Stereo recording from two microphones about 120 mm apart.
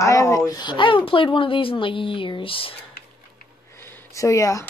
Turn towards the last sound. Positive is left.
turn(degrees=25)  # may be behind; listen again after turning